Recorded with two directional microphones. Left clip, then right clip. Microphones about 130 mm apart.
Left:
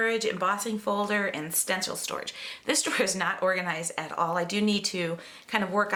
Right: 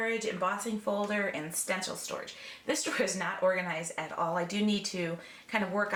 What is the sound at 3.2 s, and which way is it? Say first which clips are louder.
Speech: left 3 dB; 50° left (ahead or behind).